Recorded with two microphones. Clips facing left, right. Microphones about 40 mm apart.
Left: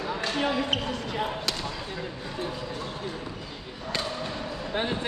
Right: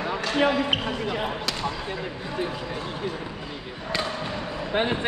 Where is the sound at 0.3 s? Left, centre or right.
Right.